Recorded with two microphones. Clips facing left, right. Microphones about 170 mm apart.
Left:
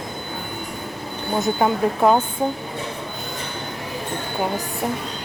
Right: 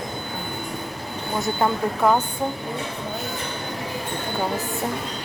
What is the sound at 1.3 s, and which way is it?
Speech, 20° left (ahead or behind).